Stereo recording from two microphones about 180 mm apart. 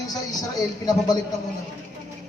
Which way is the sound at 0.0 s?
20° left (ahead or behind).